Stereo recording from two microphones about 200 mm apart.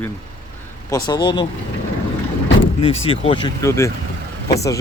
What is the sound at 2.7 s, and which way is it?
Speech, 30° left (ahead or behind).